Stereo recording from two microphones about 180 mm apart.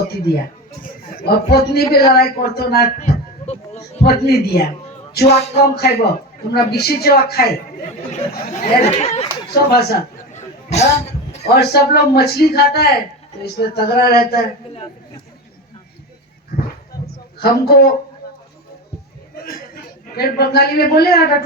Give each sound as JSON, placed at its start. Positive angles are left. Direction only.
{"t": 0.1, "sound": "speech", "side_deg": 60}
{"t": 3.0, "sound": "a sound", "side_deg": 40}
{"t": 4.0, "sound": "speech", "side_deg": 65}
{"t": 8.3, "sound": "chatter", "side_deg": 45}
{"t": 8.9, "sound": "speech", "side_deg": 40}
{"t": 9.6, "sound": "speech", "side_deg": 60}
{"t": 10.3, "sound": "a sound", "side_deg": 40}
{"t": 11.4, "sound": "speech", "side_deg": 60}
{"t": 17.3, "sound": "a woman's voice", "side_deg": 60}
{"t": 19.4, "sound": "chuckle", "side_deg": 55}
{"t": 20.1, "sound": "speech", "side_deg": 60}